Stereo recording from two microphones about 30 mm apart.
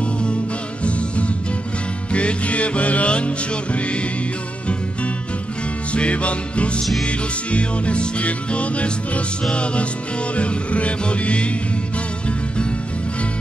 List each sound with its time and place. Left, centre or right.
0.8 s music: left
5.9 s music: left